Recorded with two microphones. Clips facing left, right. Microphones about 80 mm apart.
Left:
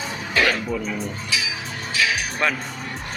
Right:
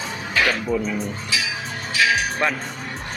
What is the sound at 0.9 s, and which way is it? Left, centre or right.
Speech, centre.